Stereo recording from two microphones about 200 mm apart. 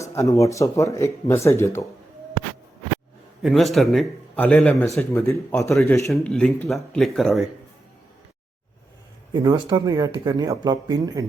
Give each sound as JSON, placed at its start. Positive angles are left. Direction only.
{"t": 0.0, "sound": "speech", "side_deg": 15}
{"t": 3.4, "sound": "a man's voice", "side_deg": 0}
{"t": 6.1, "sound": "a man's voice", "side_deg": 0}
{"t": 9.3, "sound": "speech", "side_deg": -20}